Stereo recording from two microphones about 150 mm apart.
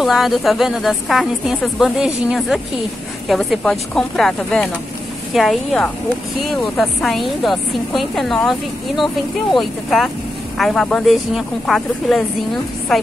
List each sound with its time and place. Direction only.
0.0 s speech: centre (ahead or behind)